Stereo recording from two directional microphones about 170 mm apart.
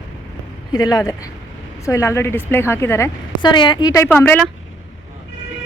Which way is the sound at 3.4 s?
25° left (ahead or behind).